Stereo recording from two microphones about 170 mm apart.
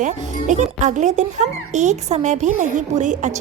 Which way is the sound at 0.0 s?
45° right (ahead or behind).